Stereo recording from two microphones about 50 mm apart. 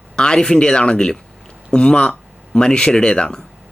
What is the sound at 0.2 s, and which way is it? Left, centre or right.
Speech, centre.